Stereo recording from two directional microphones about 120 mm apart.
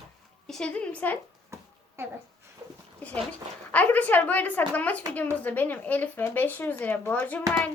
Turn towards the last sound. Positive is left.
turn(degrees=15)  # may be behind; listen again after turning